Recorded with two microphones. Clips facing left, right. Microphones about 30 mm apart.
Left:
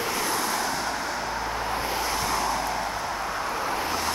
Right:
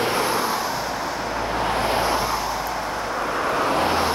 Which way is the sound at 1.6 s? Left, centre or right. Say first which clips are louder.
Right 9 dB; right.